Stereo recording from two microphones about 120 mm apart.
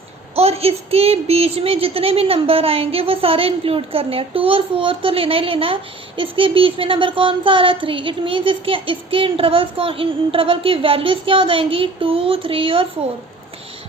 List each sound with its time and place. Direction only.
0.3 s speech: 55° right (ahead or behind)